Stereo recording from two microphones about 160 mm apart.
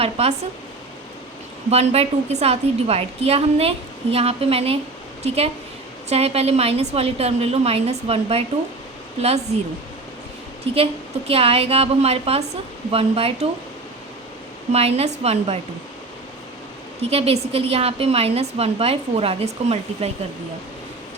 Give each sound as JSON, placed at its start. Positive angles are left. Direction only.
{"t": 0.0, "sound": "a woman's voice", "side_deg": -40}
{"t": 1.7, "sound": "a woman's voice", "side_deg": -40}
{"t": 10.7, "sound": "a woman's voice", "side_deg": -35}
{"t": 14.7, "sound": "a woman's voice", "side_deg": -40}
{"t": 17.0, "sound": "a woman's voice", "side_deg": -40}